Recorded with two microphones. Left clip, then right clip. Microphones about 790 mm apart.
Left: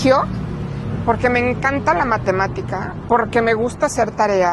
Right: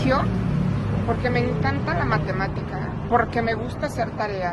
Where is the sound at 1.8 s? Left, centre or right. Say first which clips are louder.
Left 8 dB; left.